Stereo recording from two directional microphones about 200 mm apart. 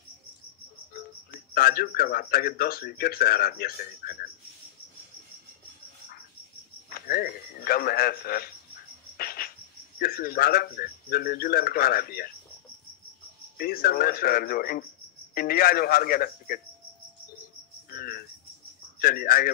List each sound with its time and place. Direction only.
0.9 s speech: 50° left (ahead or behind)
6.9 s a man's voice: 45° left (ahead or behind)
9.1 s cricket: 50° left (ahead or behind)
9.9 s speech: 45° left (ahead or behind)
13.6 s speech: 50° left (ahead or behind)
17.8 s cricket: 50° left (ahead or behind)
18.9 s speech: 50° left (ahead or behind)